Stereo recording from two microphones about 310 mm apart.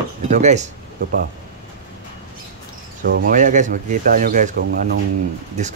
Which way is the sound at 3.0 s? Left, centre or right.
Right.